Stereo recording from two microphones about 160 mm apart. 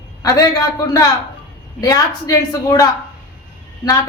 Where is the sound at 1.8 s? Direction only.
25° left (ahead or behind).